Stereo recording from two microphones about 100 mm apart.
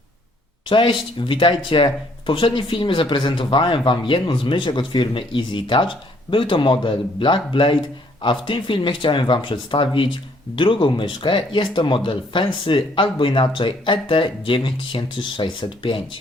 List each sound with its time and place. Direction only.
0.7 s speech: 55° left (ahead or behind)